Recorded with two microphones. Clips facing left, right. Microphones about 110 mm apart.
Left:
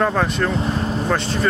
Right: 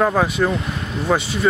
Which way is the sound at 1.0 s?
5° right (ahead or behind).